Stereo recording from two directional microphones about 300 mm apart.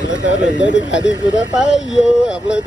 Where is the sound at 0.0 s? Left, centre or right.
Left.